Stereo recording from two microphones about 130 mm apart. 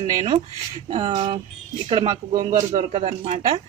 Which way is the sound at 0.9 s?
40° right (ahead or behind).